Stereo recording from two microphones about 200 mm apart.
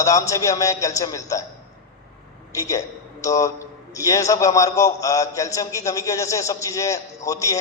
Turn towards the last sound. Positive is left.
turn(degrees=15)  # may be behind; listen again after turning